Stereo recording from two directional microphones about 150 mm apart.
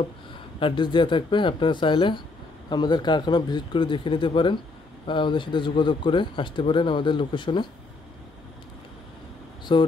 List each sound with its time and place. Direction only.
0.6 s speech: 35° left (ahead or behind)
9.7 s speech: 30° left (ahead or behind)